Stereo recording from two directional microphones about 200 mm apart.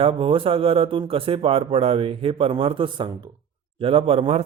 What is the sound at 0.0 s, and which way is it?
A man's voice, 25° right (ahead or behind).